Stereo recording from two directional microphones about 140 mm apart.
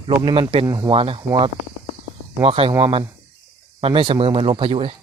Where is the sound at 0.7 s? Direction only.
30° right (ahead or behind).